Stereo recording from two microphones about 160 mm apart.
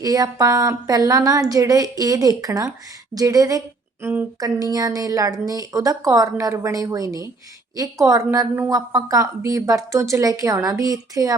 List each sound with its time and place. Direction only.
0.0 s a woman's voice: 20° right (ahead or behind)
4.0 s speech: 10° right (ahead or behind)
4.4 s a woman's voice: 25° right (ahead or behind)